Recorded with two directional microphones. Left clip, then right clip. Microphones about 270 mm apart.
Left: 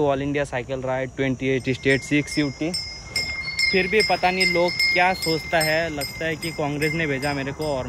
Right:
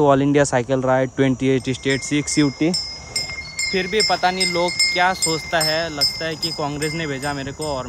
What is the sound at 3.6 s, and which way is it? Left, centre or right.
Speech, right.